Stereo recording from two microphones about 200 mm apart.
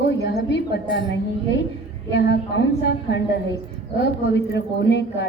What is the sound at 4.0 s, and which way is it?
A woman's voice, 65° left (ahead or behind).